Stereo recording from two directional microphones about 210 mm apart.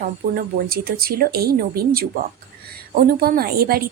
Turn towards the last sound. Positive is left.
turn(degrees=-45)  # may be behind; listen again after turning